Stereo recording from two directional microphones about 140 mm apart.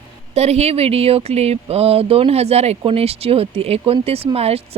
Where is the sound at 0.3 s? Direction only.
50° right (ahead or behind).